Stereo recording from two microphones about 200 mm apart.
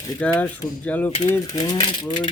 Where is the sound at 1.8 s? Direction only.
30° left (ahead or behind).